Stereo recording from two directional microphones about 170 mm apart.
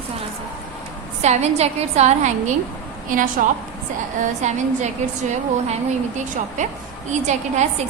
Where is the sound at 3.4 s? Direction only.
55° right (ahead or behind).